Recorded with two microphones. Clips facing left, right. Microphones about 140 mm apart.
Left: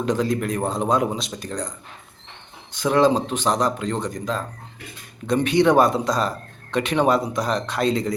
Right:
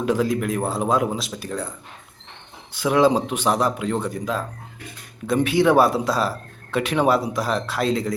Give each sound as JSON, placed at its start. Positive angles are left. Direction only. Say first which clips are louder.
{"t": 0.0, "sound": "speech", "louder": "right 1 dB", "side_deg": -5}
{"t": 2.7, "sound": "speech", "louder": "even", "side_deg": -10}